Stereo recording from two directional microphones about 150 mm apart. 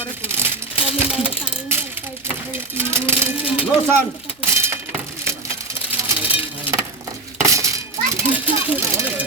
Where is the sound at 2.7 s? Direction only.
15° right (ahead or behind).